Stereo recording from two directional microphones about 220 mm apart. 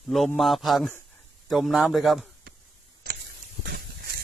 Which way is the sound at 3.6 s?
50° right (ahead or behind).